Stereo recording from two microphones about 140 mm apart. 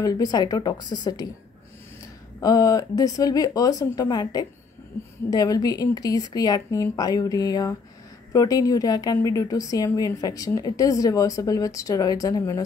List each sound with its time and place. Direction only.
0.0 s a woman's voice: 25° left (ahead or behind)
2.4 s a woman's voice: 25° left (ahead or behind)